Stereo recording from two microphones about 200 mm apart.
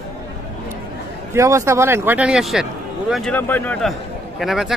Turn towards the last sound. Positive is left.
turn(degrees=0)  # may be behind; listen again after turning